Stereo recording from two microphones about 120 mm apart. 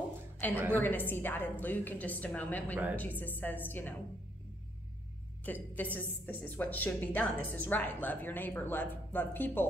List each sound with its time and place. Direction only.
0.4 s a woman's voice: 15° left (ahead or behind)
5.4 s a woman's voice: 15° left (ahead or behind)